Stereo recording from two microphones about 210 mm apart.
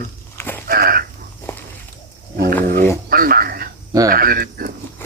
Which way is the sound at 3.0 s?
45° right (ahead or behind).